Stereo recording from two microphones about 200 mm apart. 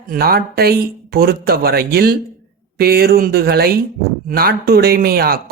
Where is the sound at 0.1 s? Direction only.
50° right (ahead or behind).